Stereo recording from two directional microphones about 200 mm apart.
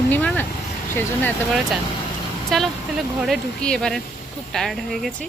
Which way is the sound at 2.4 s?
Centre (ahead or behind).